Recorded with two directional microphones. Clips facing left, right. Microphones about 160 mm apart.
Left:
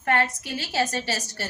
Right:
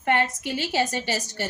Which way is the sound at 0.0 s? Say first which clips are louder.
Right 1 dB; 20° right (ahead or behind).